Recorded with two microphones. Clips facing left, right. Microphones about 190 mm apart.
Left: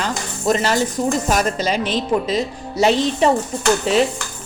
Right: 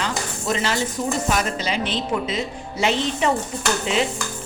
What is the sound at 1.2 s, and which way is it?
Speech, 45° left (ahead or behind).